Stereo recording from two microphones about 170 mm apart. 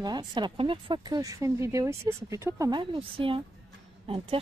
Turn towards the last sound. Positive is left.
turn(degrees=-35)  # may be behind; listen again after turning